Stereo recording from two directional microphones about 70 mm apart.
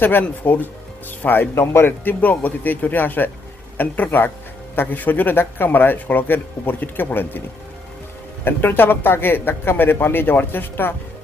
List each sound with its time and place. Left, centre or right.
0.0 s speech: left
8.4 s a man's voice: left